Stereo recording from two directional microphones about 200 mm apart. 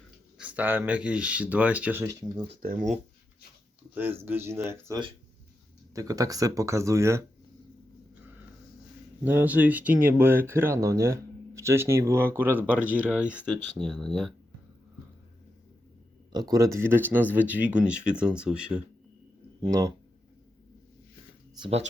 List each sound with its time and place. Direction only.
0.3 s speech: 5° right (ahead or behind)
2.6 s speech: 45° right (ahead or behind)
4.2 s speech: 10° right (ahead or behind)
9.2 s speech: 10° right (ahead or behind)
16.3 s speech: 20° right (ahead or behind)
19.6 s speech: 20° right (ahead or behind)
21.6 s speech: 30° right (ahead or behind)